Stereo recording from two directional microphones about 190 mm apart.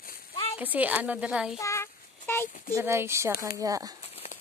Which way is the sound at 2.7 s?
15° right (ahead or behind).